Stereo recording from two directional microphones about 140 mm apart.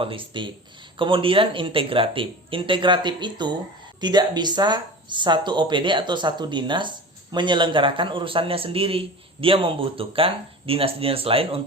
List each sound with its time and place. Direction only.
0.0 s speech: 40° right (ahead or behind)